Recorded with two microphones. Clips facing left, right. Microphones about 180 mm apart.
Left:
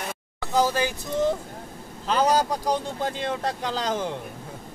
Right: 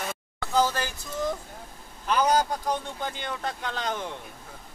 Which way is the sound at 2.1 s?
30° left (ahead or behind).